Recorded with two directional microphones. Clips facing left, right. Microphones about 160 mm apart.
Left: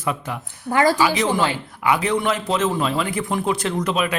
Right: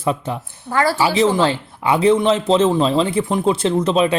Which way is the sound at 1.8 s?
30° right (ahead or behind).